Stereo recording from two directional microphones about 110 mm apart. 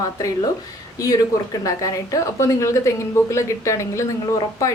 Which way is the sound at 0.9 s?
30° left (ahead or behind).